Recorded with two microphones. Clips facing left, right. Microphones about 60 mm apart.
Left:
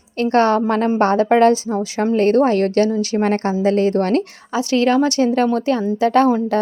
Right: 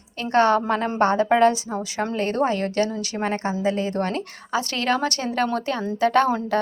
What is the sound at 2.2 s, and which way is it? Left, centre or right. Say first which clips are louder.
Speech: left 8 dB; left.